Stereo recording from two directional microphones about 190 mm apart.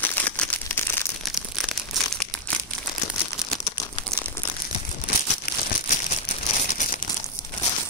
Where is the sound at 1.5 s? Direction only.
Centre (ahead or behind).